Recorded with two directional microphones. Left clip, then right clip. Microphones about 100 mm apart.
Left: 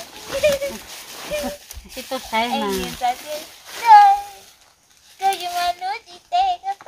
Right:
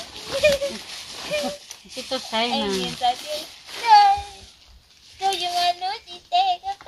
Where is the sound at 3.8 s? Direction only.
25° right (ahead or behind).